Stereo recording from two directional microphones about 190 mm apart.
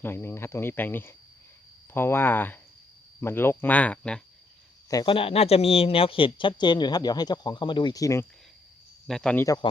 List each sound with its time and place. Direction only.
0.0 s speech: 10° left (ahead or behind)
4.9 s speech: 25° left (ahead or behind)
9.0 s speech: 5° left (ahead or behind)